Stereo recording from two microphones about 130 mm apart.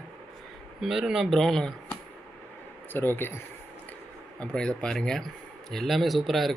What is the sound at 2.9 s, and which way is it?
Speech, 15° left (ahead or behind).